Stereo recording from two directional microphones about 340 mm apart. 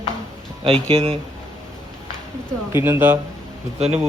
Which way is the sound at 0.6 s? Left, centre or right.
Centre.